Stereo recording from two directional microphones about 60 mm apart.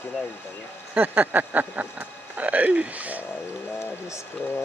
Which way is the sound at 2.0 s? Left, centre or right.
Right.